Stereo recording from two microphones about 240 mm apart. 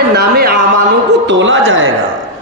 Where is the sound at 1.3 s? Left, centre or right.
Right.